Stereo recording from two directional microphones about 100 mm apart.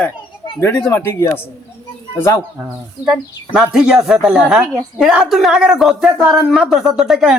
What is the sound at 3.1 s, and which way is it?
Speech, 5° right (ahead or behind).